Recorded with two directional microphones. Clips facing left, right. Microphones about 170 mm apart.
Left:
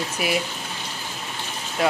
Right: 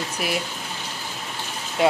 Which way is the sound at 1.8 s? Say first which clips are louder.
Right 3 dB; 25° right (ahead or behind).